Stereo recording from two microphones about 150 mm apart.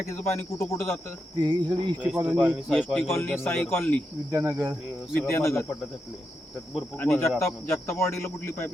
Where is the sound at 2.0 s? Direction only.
10° right (ahead or behind).